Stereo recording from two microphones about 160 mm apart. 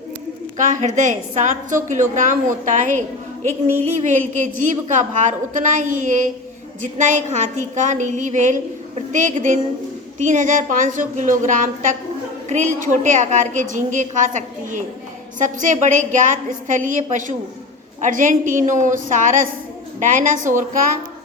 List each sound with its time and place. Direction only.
0.5 s a woman's voice: 50° right (ahead or behind)